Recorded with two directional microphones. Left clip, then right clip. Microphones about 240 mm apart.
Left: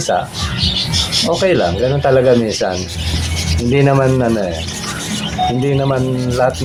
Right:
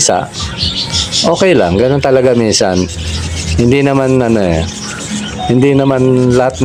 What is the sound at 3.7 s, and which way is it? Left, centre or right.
Speech, right.